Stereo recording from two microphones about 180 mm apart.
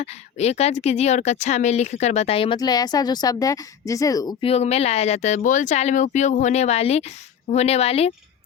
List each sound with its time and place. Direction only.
0.0 s a woman's voice: 35° left (ahead or behind)